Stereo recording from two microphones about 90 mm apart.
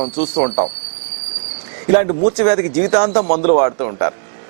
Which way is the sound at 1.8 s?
20° right (ahead or behind).